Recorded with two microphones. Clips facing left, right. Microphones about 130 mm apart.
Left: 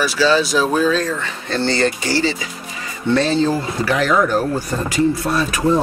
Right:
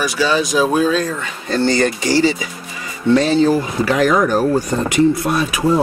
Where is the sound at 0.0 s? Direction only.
15° right (ahead or behind).